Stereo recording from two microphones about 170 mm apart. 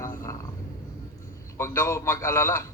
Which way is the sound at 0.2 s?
20° left (ahead or behind).